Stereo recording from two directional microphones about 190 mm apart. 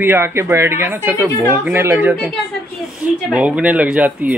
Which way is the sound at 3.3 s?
5° right (ahead or behind).